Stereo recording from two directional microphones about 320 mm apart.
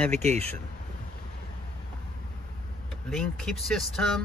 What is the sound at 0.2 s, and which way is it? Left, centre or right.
Speech, right.